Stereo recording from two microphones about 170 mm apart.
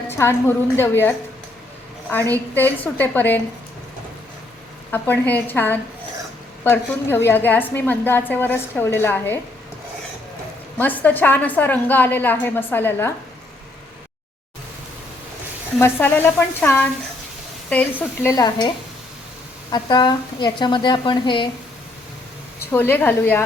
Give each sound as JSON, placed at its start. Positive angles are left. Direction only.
{"t": 0.1, "sound": "a woman's voice", "side_deg": 15}
{"t": 2.3, "sound": "a woman's voice", "side_deg": 10}
{"t": 4.9, "sound": "a woman's voice", "side_deg": 10}
{"t": 10.8, "sound": "a woman's voice", "side_deg": 10}
{"t": 15.8, "sound": "a woman's voice", "side_deg": 10}
{"t": 19.7, "sound": "a woman's voice", "side_deg": 25}
{"t": 22.7, "sound": "a woman's voice", "side_deg": 10}